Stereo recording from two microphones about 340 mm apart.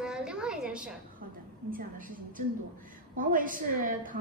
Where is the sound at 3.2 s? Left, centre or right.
Right.